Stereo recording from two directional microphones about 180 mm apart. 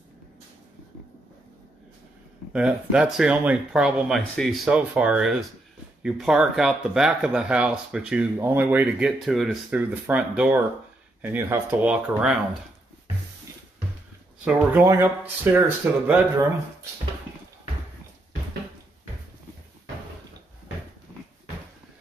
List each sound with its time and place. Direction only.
2.5 s speech: 5° right (ahead or behind)
14.4 s speech: 10° right (ahead or behind)